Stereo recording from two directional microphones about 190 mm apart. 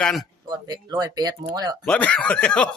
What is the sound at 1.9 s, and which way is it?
Speech, 5° left (ahead or behind).